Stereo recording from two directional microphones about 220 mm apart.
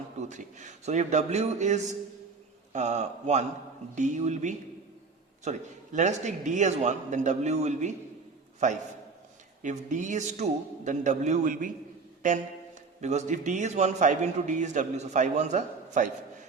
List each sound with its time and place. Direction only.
0.2 s a man's voice: 35° right (ahead or behind)
13.0 s a man's voice: 30° right (ahead or behind)